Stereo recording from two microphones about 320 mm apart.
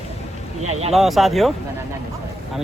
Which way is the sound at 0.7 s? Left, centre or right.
Centre.